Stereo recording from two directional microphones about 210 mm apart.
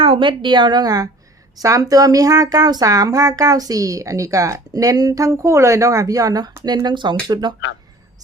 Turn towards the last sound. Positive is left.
turn(degrees=-20)  # may be behind; listen again after turning